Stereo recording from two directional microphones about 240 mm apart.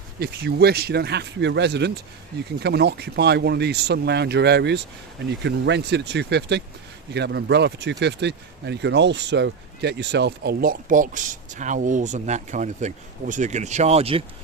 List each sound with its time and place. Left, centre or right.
0.2 s speech: right